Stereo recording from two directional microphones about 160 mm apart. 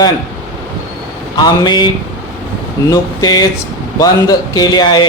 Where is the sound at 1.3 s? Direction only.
25° left (ahead or behind).